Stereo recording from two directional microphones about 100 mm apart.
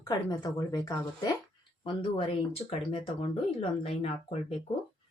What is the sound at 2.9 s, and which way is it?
Speech, 65° left (ahead or behind).